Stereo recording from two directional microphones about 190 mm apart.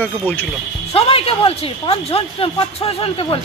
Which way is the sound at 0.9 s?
30° left (ahead or behind).